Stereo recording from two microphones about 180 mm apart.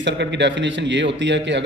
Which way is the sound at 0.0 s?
75° right (ahead or behind).